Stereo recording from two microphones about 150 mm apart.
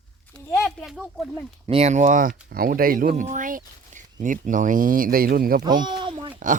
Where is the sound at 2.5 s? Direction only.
80° right.